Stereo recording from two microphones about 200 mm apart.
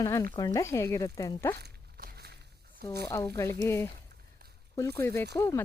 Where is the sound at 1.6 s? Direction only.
50° right (ahead or behind).